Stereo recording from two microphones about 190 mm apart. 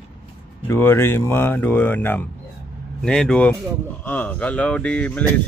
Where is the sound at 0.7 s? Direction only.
10° left (ahead or behind).